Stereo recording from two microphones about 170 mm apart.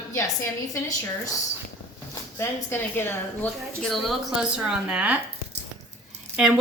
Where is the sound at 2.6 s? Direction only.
15° left (ahead or behind).